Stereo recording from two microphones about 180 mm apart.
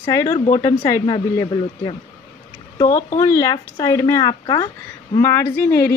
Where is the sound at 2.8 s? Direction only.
45° left (ahead or behind).